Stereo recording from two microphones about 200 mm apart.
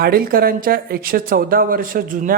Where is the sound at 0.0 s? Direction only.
50° right (ahead or behind).